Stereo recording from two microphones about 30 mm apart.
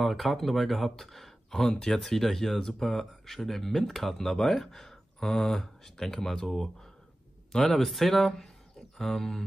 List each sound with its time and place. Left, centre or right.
0.0 s speech: centre
1.7 s speech: left
2.0 s speech: centre